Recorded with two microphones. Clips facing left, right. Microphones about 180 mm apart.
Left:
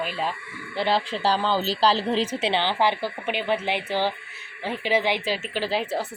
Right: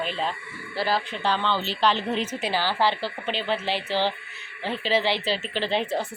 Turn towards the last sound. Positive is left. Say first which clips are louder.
# even
turn(degrees=5)  # may be behind; listen again after turning